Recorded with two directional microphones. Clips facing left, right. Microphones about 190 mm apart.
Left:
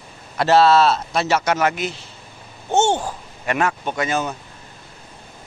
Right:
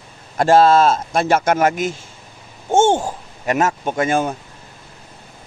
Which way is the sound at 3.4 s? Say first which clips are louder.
Right 3 dB; 40° right (ahead or behind).